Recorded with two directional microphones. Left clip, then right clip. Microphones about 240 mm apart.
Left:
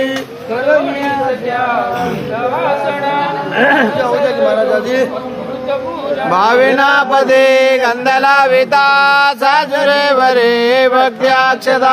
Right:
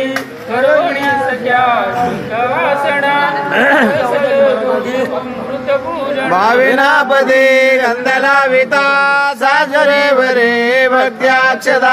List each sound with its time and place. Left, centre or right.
3.1 s music: right
6.3 s mantra: centre